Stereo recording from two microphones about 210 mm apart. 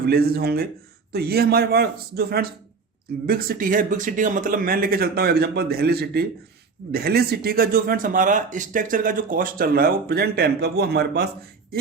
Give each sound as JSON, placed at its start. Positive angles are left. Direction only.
{"t": 0.1, "sound": "speech", "side_deg": -50}